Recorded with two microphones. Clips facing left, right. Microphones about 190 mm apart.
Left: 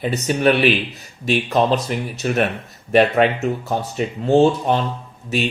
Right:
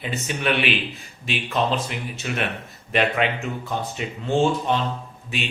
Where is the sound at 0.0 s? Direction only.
40° left (ahead or behind).